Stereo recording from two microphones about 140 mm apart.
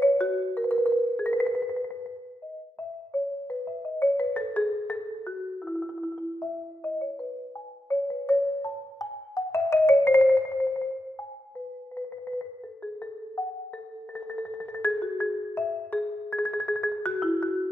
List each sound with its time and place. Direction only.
0.0 s music: 15° left (ahead or behind)
3.1 s music: 10° left (ahead or behind)
6.4 s music: 15° left (ahead or behind)
9.3 s marimba: 20° left (ahead or behind)
12.3 s music: 10° left (ahead or behind)
14.1 s music: 10° left (ahead or behind)